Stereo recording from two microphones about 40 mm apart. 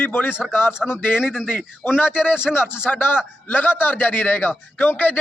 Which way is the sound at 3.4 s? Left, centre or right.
Left.